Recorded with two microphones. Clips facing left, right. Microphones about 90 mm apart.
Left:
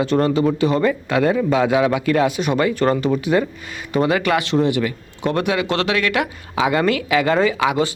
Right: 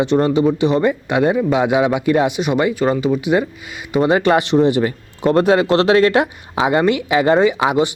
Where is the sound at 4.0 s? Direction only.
30° right (ahead or behind).